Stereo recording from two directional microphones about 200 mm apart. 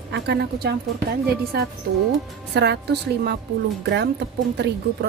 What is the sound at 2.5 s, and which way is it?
A woman's voice, 55° right (ahead or behind).